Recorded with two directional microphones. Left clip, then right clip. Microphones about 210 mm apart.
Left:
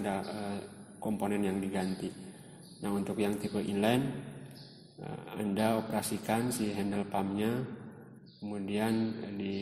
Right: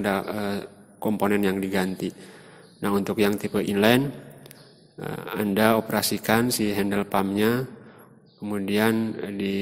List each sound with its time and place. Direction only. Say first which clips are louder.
0.0 s speech: right 10 dB; 50° right (ahead or behind)
5.0 s speech: right 10 dB; 50° right (ahead or behind)